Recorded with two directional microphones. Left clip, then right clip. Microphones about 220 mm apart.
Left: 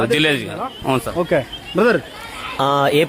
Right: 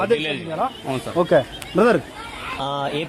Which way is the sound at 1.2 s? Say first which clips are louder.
Right 1 dB; centre (ahead or behind).